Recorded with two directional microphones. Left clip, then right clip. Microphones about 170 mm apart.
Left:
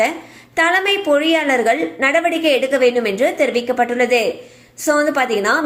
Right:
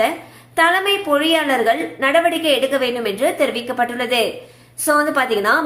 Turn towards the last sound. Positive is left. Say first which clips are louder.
# even
turn(degrees=10)  # may be behind; listen again after turning